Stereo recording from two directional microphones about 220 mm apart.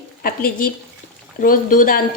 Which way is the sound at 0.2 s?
40° left (ahead or behind).